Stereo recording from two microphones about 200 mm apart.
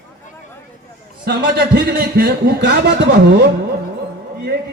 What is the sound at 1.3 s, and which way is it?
A man's voice, 50° right (ahead or behind).